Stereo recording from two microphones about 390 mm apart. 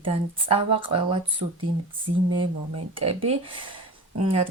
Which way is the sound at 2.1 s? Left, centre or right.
Right.